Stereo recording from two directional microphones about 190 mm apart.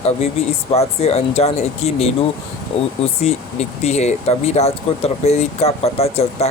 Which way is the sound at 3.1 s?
35° left (ahead or behind).